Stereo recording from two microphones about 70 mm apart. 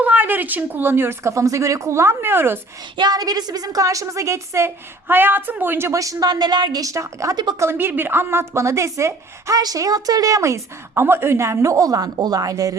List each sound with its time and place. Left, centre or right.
0.0 s a woman's voice: right
2.9 s a woman's voice: right
5.9 s a woman's voice: right
7.6 s a woman's voice: right
9.6 s a woman's voice: right